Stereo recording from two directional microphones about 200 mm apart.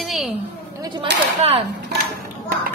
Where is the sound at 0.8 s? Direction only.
20° right (ahead or behind).